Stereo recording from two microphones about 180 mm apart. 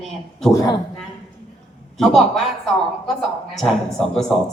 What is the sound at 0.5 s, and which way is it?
Speech, 25° left (ahead or behind).